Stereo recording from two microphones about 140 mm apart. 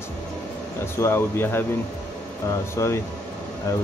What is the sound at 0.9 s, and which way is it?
Speech, 15° left (ahead or behind).